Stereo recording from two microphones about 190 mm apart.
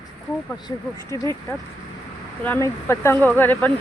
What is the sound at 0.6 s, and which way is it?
Speech, 15° left (ahead or behind).